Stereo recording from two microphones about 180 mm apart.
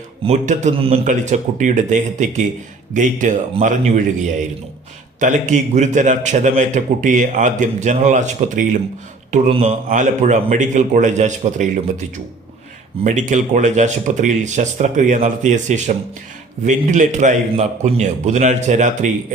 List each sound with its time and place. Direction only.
0.3 s a man's voice: 40° right (ahead or behind)
13.1 s a man's voice: 45° right (ahead or behind)